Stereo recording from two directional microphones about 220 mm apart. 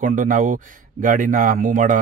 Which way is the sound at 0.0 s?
35° right (ahead or behind).